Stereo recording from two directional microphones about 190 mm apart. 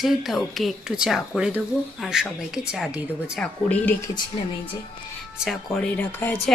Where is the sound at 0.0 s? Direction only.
Centre (ahead or behind).